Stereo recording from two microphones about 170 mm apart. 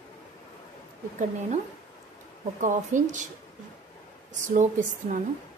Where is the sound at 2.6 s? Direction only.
45° right (ahead or behind).